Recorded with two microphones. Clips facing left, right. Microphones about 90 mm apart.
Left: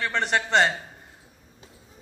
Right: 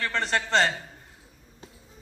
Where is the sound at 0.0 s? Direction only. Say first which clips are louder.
Left 2 dB; 15° left (ahead or behind).